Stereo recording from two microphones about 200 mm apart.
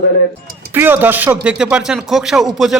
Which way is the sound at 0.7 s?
10° right (ahead or behind).